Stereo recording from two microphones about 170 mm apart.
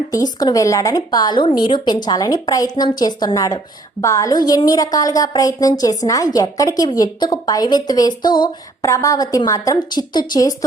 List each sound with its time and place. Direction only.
0.1 s a woman's voice: 20° left (ahead or behind)